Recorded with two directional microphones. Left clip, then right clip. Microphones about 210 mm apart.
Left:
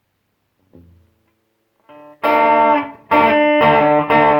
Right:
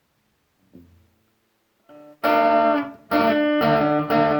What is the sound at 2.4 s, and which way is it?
Music, 30° left (ahead or behind).